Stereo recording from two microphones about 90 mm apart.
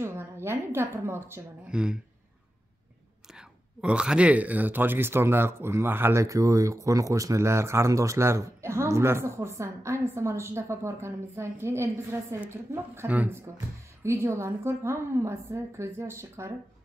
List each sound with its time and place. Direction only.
0.0 s speech: 30° right (ahead or behind)
1.7 s speech: 10° right (ahead or behind)
3.3 s speech: 10° right (ahead or behind)
6.2 s speech: 35° right (ahead or behind)
13.1 s speech: 20° right (ahead or behind)
14.0 s speech: 30° right (ahead or behind)